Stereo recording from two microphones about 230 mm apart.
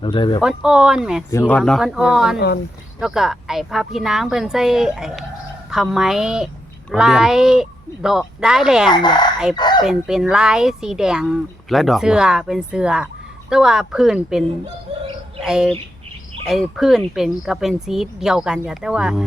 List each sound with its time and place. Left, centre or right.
0.0 s speech: left
0.4 s speech: centre
1.3 s speech: centre
8.9 s speech: centre
9.6 s a sound: centre
9.8 s speech: centre